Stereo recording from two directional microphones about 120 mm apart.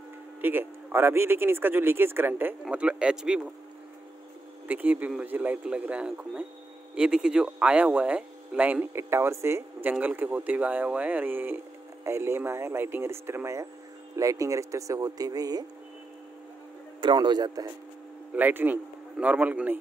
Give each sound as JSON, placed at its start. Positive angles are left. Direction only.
{"t": 0.4, "sound": "speech", "side_deg": -15}
{"t": 4.6, "sound": "speech", "side_deg": -15}
{"t": 17.0, "sound": "speech", "side_deg": -40}
{"t": 18.3, "sound": "speech", "side_deg": -15}